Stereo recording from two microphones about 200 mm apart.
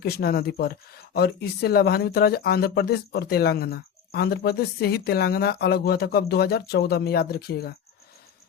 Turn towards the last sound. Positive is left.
turn(degrees=50)  # may be behind; listen again after turning